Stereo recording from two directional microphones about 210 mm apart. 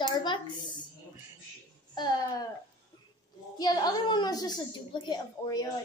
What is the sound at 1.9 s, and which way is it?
Speech, 20° left (ahead or behind).